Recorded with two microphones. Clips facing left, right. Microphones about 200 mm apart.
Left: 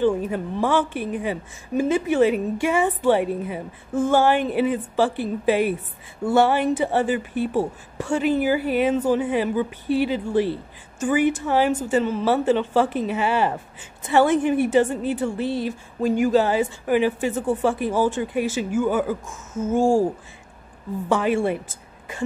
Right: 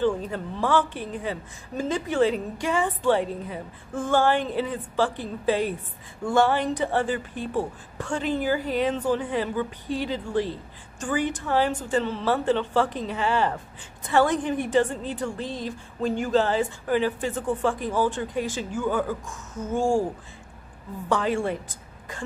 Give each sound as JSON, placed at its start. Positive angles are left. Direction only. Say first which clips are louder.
{"t": 0.0, "sound": "a woman's voice", "louder": "left 4 dB", "side_deg": 15}
{"t": 21.1, "sound": "a woman's voice", "louder": "left 4 dB", "side_deg": 10}